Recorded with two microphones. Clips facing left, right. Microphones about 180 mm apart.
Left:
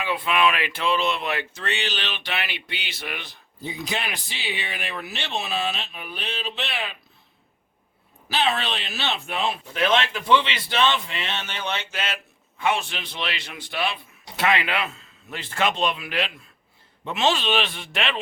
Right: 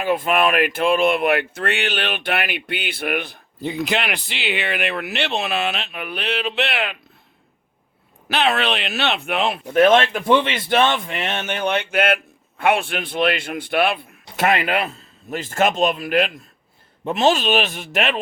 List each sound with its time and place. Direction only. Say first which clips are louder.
0.0 s speech: right 4 dB; 45° right (ahead or behind)
3.6 s speech: right 7 dB; 75° right (ahead or behind)
8.3 s speech: right 5 dB; 65° right (ahead or behind); by 18.1 s 45° right (ahead or behind)